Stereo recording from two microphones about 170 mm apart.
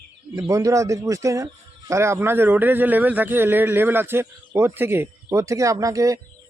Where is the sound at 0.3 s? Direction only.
20° right (ahead or behind).